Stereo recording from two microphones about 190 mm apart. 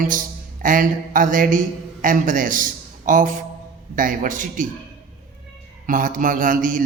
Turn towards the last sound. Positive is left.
turn(degrees=-45)  # may be behind; listen again after turning